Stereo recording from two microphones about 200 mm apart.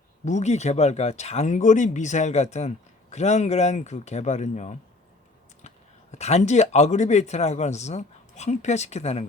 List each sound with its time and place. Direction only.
0.3 s speech: 35° left (ahead or behind)